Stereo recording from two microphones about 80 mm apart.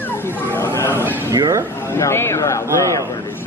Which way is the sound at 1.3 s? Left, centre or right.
Right.